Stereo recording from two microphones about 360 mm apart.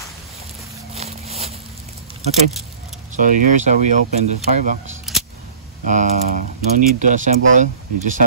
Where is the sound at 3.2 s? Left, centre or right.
Right.